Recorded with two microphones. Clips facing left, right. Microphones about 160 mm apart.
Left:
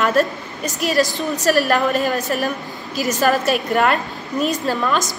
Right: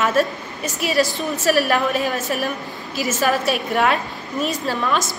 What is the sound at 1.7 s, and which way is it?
A woman's voice, centre (ahead or behind).